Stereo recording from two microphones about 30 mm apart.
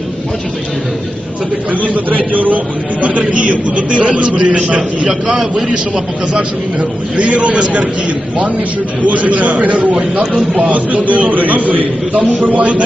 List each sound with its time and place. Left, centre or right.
1.7 s a man's voice: right
3.0 s a man's voice: right
5.0 s a man's voice: right
7.2 s a man's voice: right
9.0 s a man's voice: right